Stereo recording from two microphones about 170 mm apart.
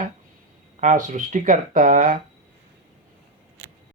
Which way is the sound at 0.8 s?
45° right (ahead or behind).